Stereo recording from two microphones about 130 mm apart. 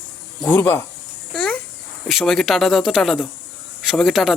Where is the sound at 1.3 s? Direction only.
5° left (ahead or behind).